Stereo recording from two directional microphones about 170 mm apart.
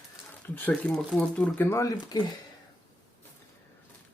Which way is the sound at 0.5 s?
10° left (ahead or behind).